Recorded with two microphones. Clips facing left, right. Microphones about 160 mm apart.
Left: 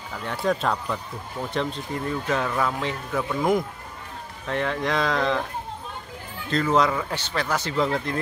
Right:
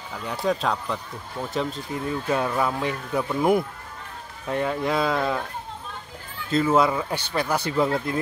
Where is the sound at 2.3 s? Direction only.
15° right (ahead or behind).